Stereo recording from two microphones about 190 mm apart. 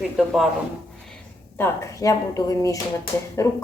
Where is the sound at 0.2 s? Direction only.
Centre (ahead or behind).